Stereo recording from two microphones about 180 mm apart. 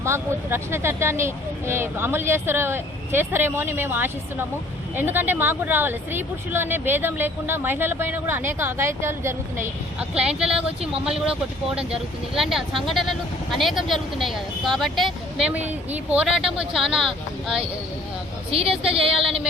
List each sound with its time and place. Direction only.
0.0 s speech: 15° right (ahead or behind)
18.7 s speech: 5° right (ahead or behind)